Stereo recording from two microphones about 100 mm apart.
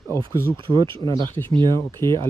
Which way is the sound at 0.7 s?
55° right (ahead or behind).